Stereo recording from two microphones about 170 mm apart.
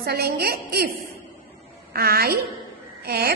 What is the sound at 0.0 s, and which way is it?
Speech, 70° right (ahead or behind).